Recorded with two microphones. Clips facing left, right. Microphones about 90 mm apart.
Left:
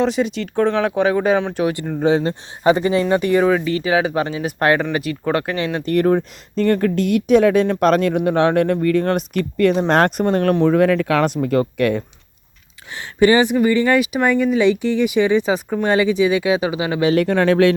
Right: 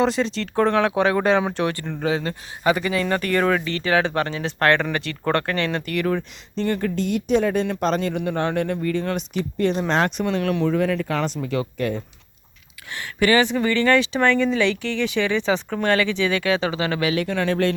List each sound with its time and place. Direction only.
0.0 s speech: 5° left (ahead or behind)
2.0 s a man's voice: 30° left (ahead or behind)
5.8 s speech: 35° left (ahead or behind); by 9.8 s 65° left (ahead or behind)
9.9 s speech: 50° left (ahead or behind)
10.8 s speech: 60° left (ahead or behind)
11.4 s speech: 50° left (ahead or behind)
11.8 s speech: 70° left (ahead or behind)
13.0 s speech: 20° left (ahead or behind)
17.2 s speech: 50° left (ahead or behind)